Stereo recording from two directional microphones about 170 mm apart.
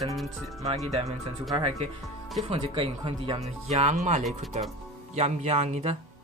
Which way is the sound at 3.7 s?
40° right (ahead or behind).